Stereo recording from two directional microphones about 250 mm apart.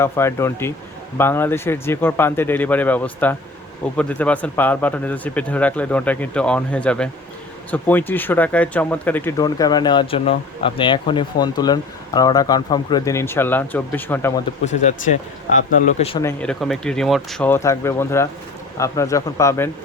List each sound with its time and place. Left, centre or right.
0.0 s speech: centre
14.6 s speech: left
16.2 s speech: centre